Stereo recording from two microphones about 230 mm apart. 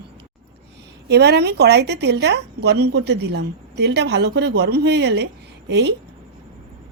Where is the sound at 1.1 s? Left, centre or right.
Right.